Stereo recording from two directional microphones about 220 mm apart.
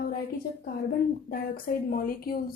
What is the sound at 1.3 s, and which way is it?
A woman's voice, 40° left (ahead or behind).